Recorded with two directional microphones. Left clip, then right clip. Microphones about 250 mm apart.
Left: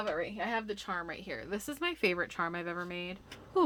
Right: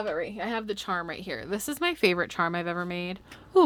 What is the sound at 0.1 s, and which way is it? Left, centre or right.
Speech, right.